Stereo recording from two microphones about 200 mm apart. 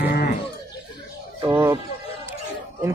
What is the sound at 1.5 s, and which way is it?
Music, 15° right (ahead or behind).